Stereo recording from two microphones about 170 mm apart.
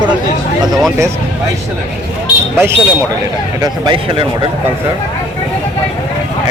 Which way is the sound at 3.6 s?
30° right (ahead or behind).